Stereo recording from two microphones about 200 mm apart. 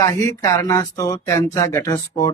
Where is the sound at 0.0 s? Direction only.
15° left (ahead or behind).